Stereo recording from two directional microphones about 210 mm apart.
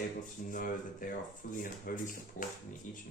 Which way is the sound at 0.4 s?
40° left (ahead or behind).